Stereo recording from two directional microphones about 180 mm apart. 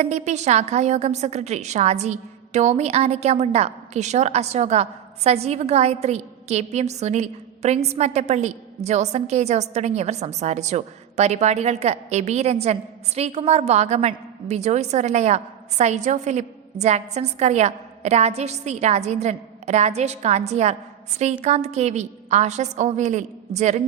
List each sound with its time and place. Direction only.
0.0 s a woman's voice: 40° right (ahead or behind)